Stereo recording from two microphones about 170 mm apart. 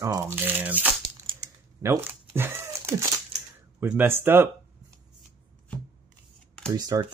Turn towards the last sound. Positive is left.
turn(degrees=-25)  # may be behind; listen again after turning